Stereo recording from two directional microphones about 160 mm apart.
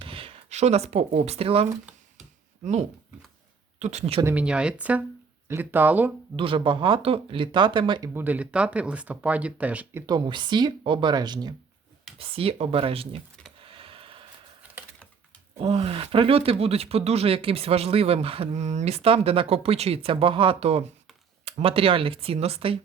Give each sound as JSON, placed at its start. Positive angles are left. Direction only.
{"t": 0.0, "sound": "speech", "side_deg": -35}
{"t": 3.8, "sound": "speech", "side_deg": -45}
{"t": 4.2, "sound": "speech", "side_deg": -10}
{"t": 6.3, "sound": "speech", "side_deg": -35}
{"t": 8.1, "sound": "speech", "side_deg": -10}
{"t": 10.1, "sound": "speech", "side_deg": -30}
{"t": 12.2, "sound": "speech", "side_deg": -35}
{"t": 13.6, "sound": "a sound", "side_deg": -35}
{"t": 15.5, "sound": "speech", "side_deg": -40}